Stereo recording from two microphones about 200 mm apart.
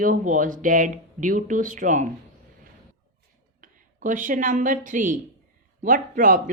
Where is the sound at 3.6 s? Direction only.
40° right (ahead or behind).